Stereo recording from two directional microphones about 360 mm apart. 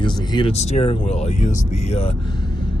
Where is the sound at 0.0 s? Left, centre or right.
Centre.